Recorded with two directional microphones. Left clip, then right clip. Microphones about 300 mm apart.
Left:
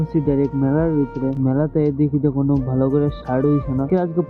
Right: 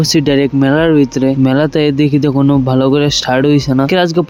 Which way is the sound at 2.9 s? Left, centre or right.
Centre.